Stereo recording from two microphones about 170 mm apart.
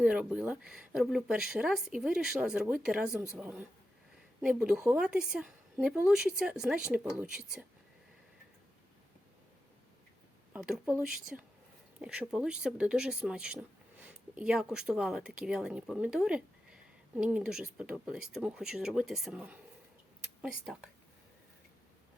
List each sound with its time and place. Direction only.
0.0 s speech: 5° right (ahead or behind)
10.5 s speech: 5° right (ahead or behind)